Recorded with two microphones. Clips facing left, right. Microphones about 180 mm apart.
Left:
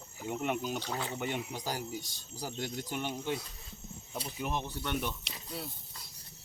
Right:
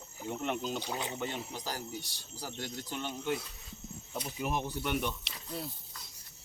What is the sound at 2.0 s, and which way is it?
Speech, 70° right (ahead or behind).